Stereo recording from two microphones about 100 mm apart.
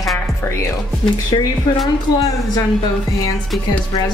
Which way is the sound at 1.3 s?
50° left (ahead or behind).